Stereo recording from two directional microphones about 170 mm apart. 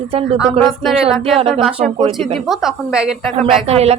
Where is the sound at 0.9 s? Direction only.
Centre (ahead or behind).